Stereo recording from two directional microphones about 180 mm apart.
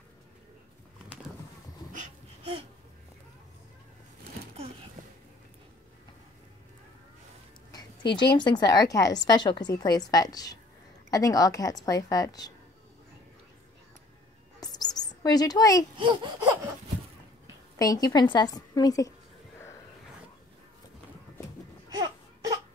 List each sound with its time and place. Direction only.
7.7 s a woman's voice: 25° left (ahead or behind)
14.6 s bird: 20° left (ahead or behind)
16.0 s laughter: 25° right (ahead or behind)
17.7 s a woman's voice: 20° left (ahead or behind)
21.8 s baby cry: 20° right (ahead or behind)